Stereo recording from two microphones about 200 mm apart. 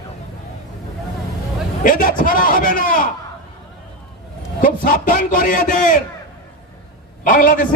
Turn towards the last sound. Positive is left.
turn(degrees=45)  # may be behind; listen again after turning